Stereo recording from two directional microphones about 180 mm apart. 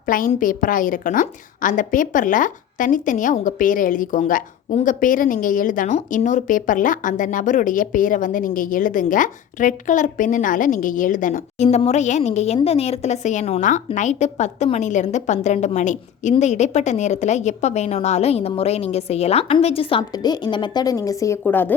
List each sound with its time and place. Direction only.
0.0 s a woman's voice: 50° left (ahead or behind); by 21.7 s 10° left (ahead or behind)